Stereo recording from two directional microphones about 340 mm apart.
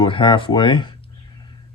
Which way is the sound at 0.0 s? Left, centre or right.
Centre.